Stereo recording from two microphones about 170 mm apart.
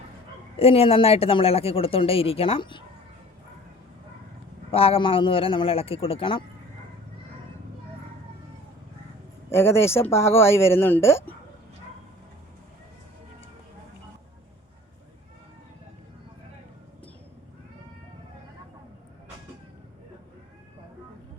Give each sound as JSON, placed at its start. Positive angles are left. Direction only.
{"t": 0.6, "sound": "speech", "side_deg": 35}
{"t": 4.7, "sound": "speech", "side_deg": 35}
{"t": 9.5, "sound": "speech", "side_deg": 15}